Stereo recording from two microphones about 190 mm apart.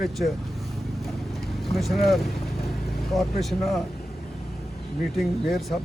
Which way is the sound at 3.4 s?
Centre (ahead or behind).